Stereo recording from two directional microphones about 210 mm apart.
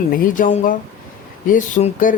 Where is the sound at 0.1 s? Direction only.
40° left (ahead or behind).